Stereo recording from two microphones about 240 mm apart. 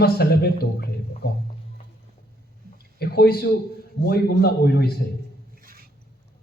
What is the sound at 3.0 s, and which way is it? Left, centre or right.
A man's voice, left.